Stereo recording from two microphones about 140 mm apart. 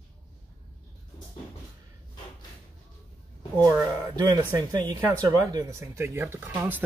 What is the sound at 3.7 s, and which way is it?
Speech, 25° right (ahead or behind).